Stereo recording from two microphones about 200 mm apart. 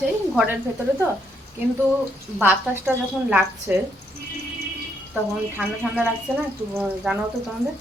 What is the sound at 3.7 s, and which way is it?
Speech, 10° right (ahead or behind).